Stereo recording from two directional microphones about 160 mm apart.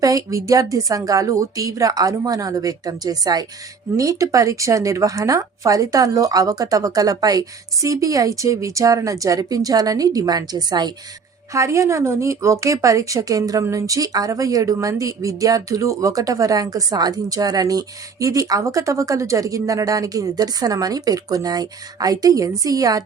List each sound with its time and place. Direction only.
0.0 s speech: 20° right (ahead or behind)